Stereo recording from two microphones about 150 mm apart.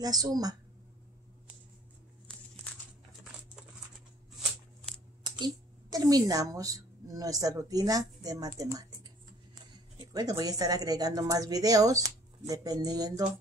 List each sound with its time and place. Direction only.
0.0 s a woman's voice: 25° right (ahead or behind)
5.4 s a woman's voice: 25° right (ahead or behind)
10.1 s a woman's voice: 25° right (ahead or behind)